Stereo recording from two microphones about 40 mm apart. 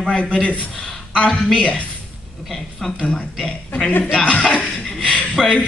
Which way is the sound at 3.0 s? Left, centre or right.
Left.